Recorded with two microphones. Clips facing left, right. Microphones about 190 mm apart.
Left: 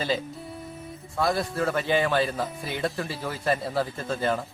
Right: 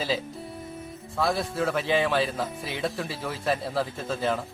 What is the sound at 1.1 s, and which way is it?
A man's voice, centre (ahead or behind).